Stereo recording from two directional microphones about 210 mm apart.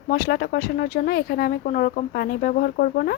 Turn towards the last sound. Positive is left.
turn(degrees=45)  # may be behind; listen again after turning